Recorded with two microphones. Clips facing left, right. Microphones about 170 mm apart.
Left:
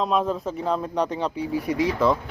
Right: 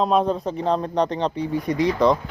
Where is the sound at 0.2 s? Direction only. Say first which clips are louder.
Right 3 dB; 35° right (ahead or behind).